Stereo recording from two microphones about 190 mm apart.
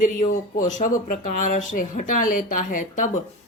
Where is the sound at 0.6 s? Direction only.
40° left (ahead or behind).